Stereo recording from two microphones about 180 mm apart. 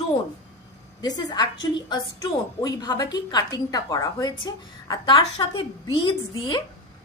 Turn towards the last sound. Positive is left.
turn(degrees=25)  # may be behind; listen again after turning